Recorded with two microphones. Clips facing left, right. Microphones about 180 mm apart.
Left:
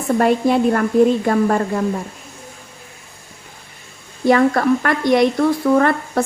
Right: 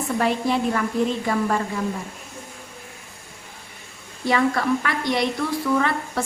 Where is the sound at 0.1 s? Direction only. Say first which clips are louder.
Left 8 dB; 50° left (ahead or behind).